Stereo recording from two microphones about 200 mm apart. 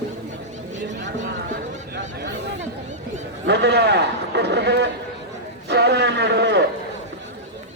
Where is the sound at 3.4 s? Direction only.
60° right (ahead or behind).